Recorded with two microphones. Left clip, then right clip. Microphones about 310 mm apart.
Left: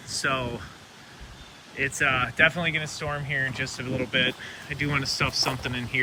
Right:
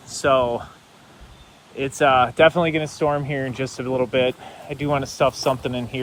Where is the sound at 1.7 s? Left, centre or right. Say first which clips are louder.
Right 7 dB; centre.